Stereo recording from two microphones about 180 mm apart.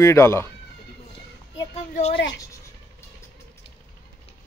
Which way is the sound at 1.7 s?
40° left (ahead or behind).